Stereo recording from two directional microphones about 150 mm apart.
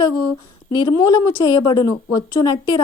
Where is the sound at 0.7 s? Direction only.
30° left (ahead or behind).